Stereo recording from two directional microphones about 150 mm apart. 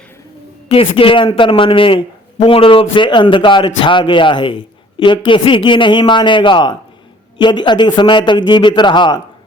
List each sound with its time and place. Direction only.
0.7 s speech: 35° left (ahead or behind)